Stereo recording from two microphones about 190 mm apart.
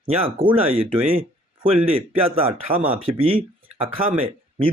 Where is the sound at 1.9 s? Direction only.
30° right (ahead or behind).